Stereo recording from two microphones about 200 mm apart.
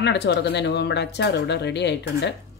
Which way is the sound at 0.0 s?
60° left (ahead or behind).